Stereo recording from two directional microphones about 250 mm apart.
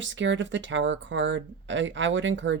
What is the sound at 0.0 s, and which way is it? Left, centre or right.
Speech, right.